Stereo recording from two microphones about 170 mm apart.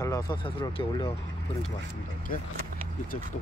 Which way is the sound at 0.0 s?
20° left (ahead or behind).